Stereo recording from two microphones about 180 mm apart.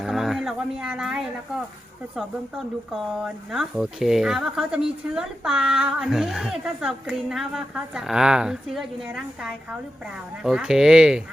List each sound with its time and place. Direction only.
0.0 s speech: centre (ahead or behind)